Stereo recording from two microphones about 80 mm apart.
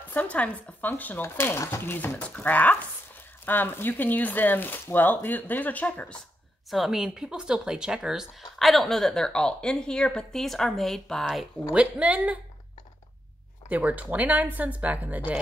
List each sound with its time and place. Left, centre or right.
0.1 s speech: centre
6.7 s speech: centre
11.7 s speech: centre
13.7 s speech: centre